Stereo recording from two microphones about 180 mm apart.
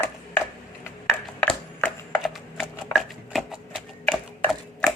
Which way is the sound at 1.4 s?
5° left (ahead or behind).